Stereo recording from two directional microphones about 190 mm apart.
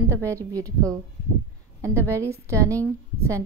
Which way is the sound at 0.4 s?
20° right (ahead or behind).